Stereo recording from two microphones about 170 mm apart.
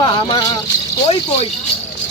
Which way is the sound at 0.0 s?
25° left (ahead or behind).